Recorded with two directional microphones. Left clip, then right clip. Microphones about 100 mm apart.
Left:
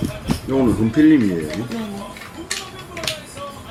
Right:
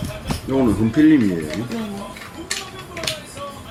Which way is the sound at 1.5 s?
20° left (ahead or behind).